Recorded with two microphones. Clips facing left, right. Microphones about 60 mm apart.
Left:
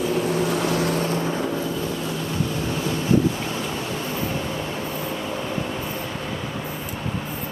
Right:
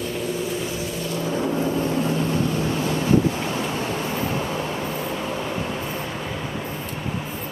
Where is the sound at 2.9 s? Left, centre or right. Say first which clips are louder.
Even; centre.